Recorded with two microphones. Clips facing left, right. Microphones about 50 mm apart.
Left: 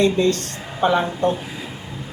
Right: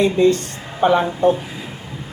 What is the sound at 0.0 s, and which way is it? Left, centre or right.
A woman's voice, centre.